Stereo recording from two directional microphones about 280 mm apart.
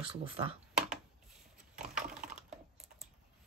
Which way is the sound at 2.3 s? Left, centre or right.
Centre.